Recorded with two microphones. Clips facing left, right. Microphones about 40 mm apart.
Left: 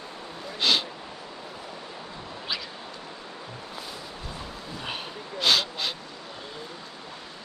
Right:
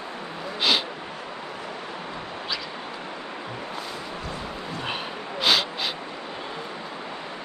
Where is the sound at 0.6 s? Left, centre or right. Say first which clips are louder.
Right 1 dB; centre.